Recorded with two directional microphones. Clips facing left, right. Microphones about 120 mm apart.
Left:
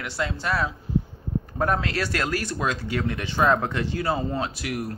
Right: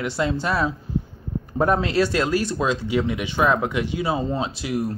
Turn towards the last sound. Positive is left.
turn(degrees=-25)  # may be behind; listen again after turning